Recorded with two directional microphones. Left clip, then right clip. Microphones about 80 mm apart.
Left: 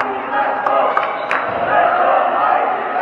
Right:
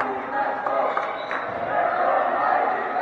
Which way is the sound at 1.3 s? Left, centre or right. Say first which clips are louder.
Left 11 dB; right.